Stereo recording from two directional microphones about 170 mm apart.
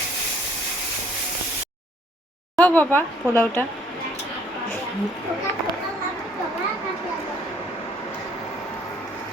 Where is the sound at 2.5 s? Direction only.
10° left (ahead or behind).